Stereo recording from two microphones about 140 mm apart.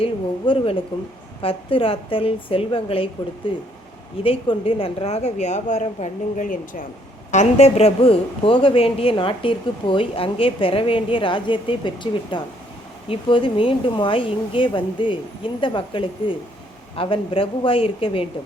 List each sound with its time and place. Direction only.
0.0 s a woman's voice: 40° left (ahead or behind); by 6.8 s 75° left (ahead or behind)
7.3 s speech: 55° left (ahead or behind)